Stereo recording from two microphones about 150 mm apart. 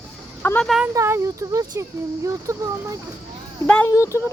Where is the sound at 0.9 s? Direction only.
20° right (ahead or behind).